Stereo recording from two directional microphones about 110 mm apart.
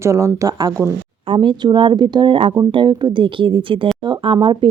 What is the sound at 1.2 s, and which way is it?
Speech, 50° right (ahead or behind).